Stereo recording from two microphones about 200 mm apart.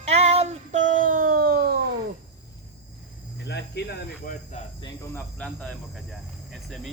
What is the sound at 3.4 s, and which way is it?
Cricket, 55° left (ahead or behind).